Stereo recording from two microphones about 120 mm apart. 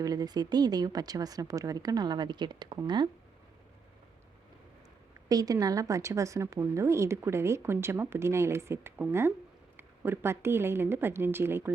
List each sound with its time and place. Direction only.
0.0 s speech: 35° right (ahead or behind)
5.3 s a woman's voice: 30° right (ahead or behind)